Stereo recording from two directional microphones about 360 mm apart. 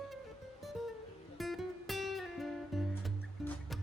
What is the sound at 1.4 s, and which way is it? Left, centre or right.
Music, centre.